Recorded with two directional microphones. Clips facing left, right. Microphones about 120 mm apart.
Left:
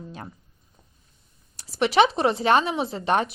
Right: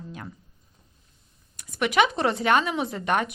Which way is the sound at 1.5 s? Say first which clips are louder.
Left 3 dB; 30° left (ahead or behind).